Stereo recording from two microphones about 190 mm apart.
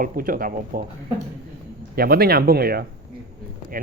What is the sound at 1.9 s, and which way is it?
Speech, 50° right (ahead or behind).